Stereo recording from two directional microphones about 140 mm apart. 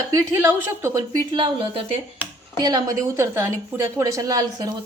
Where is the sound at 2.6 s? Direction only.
25° right (ahead or behind).